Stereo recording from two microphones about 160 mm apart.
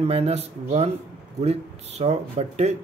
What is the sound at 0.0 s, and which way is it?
Speech, 40° right (ahead or behind).